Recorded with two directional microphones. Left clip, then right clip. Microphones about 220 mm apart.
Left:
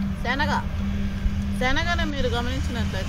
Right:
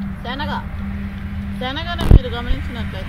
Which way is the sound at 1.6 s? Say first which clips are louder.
Even; 10° left (ahead or behind).